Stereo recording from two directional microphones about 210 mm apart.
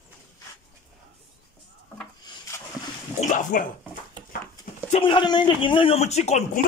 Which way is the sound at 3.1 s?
35° left (ahead or behind).